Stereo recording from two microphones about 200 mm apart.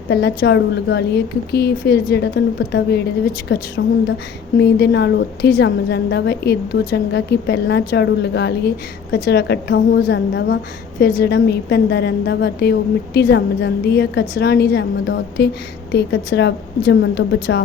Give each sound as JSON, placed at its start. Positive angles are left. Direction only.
{"t": 0.1, "sound": "a woman's voice", "side_deg": 55}